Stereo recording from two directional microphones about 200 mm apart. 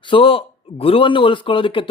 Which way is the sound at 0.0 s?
25° left (ahead or behind).